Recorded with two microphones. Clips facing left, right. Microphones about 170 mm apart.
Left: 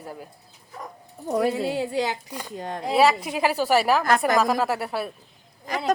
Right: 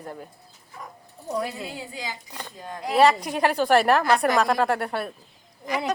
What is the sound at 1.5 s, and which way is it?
Speech, 75° left (ahead or behind).